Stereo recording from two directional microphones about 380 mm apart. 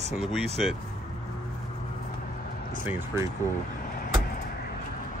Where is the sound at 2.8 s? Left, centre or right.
Centre.